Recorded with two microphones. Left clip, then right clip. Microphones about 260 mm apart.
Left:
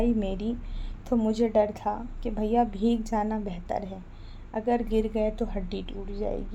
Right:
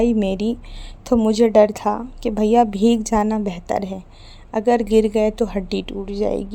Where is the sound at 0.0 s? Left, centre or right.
Right.